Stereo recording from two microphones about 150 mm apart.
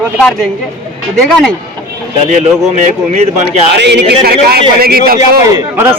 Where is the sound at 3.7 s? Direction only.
90° right.